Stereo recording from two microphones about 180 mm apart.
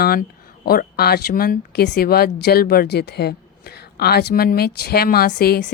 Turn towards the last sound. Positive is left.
turn(degrees=60)  # may be behind; listen again after turning